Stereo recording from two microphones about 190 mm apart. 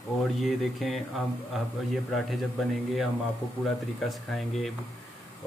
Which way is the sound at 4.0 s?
Centre (ahead or behind).